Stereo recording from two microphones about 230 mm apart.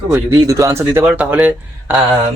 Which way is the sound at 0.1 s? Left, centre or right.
Centre.